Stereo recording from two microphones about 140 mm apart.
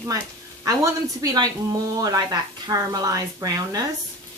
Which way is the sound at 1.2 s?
25° right (ahead or behind).